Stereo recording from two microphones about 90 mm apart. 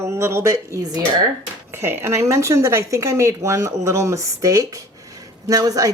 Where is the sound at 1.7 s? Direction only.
30° right (ahead or behind).